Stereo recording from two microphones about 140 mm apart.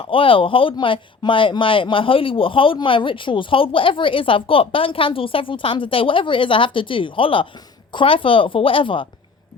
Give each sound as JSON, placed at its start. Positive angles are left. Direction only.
{"t": 0.0, "sound": "speech", "side_deg": 40}